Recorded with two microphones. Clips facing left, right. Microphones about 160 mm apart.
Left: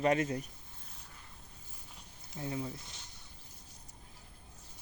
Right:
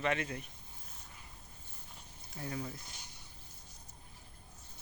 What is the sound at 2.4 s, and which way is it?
Speech, 20° left (ahead or behind).